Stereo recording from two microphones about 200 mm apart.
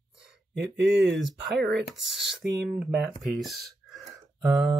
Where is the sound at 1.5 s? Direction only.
55° right (ahead or behind).